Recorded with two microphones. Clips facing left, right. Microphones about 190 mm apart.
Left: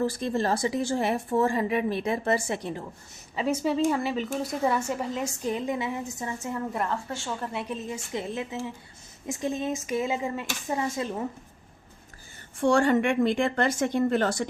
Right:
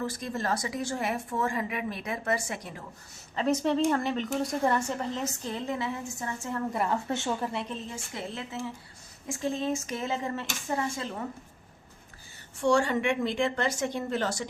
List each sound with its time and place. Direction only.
0.0 s speech: 30° left (ahead or behind)
3.3 s a woman's voice: 5° left (ahead or behind)
7.1 s a woman's voice: 20° right (ahead or behind)
7.5 s a woman's voice: 15° left (ahead or behind)
12.6 s speech: 55° left (ahead or behind)